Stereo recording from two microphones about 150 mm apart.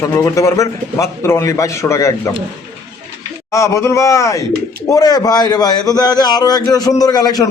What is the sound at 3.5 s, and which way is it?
A man's voice, 20° left (ahead or behind).